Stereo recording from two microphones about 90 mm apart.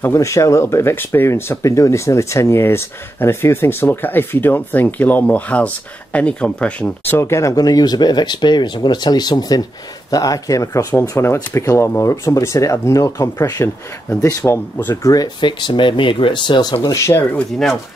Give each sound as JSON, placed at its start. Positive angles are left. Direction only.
{"t": 0.0, "sound": "speech", "side_deg": 35}
{"t": 7.1, "sound": "speech", "side_deg": 30}
{"t": 7.5, "sound": "speech", "side_deg": 45}
{"t": 13.6, "sound": "speech", "side_deg": 25}
{"t": 15.0, "sound": "speech", "side_deg": 45}
{"t": 15.4, "sound": "speech", "side_deg": 60}
{"t": 16.9, "sound": "speech", "side_deg": 30}